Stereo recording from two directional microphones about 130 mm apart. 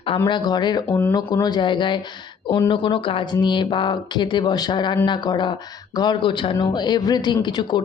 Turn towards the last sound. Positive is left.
turn(degrees=35)  # may be behind; listen again after turning